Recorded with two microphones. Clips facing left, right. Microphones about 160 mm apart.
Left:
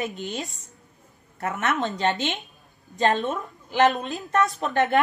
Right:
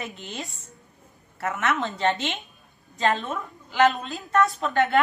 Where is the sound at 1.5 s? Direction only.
20° left (ahead or behind).